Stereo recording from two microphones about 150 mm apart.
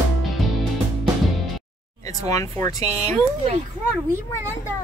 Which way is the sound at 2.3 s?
20° left (ahead or behind).